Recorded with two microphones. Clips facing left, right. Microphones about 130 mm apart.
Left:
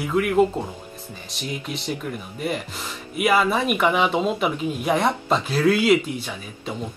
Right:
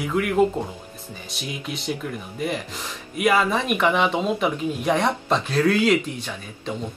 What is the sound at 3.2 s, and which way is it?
Speech, 5° left (ahead or behind).